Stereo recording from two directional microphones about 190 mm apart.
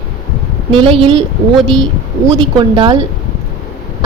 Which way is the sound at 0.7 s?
30° right (ahead or behind).